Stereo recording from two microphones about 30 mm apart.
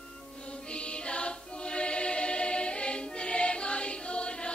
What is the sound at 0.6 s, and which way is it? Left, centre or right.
Music, left.